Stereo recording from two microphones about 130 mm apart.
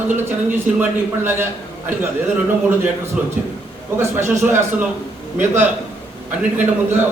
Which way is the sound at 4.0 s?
20° right (ahead or behind).